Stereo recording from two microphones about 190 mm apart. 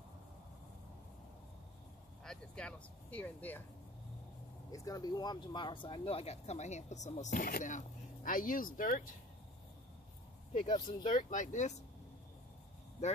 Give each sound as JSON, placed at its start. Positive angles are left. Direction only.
{"t": 2.2, "sound": "speech", "side_deg": 5}
{"t": 4.6, "sound": "speech", "side_deg": 20}
{"t": 10.5, "sound": "speech", "side_deg": 25}
{"t": 11.1, "sound": "speech", "side_deg": 40}